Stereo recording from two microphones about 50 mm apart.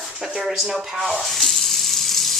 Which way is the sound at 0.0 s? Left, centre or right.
Centre.